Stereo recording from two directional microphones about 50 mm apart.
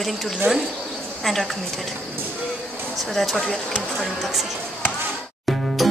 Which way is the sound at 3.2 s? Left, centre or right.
Centre.